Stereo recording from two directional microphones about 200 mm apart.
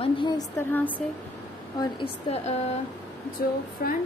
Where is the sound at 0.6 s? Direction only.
10° left (ahead or behind).